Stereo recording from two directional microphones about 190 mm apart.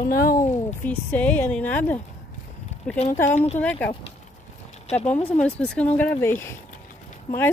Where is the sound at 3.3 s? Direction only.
35° left (ahead or behind).